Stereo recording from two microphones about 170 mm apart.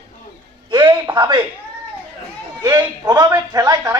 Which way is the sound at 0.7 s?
30° right (ahead or behind).